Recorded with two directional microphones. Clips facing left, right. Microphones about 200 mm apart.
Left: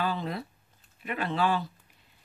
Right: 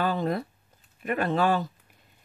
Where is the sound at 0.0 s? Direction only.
45° right (ahead or behind).